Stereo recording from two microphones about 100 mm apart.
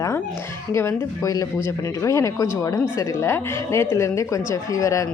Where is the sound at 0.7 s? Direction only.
25° left (ahead or behind).